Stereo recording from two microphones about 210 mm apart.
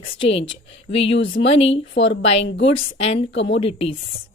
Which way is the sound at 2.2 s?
30° left (ahead or behind).